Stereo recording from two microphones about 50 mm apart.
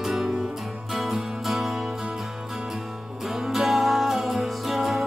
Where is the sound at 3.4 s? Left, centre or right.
Centre.